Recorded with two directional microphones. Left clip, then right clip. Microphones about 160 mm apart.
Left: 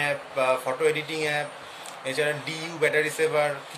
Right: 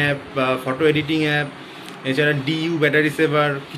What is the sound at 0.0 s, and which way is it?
Speech, 10° left (ahead or behind).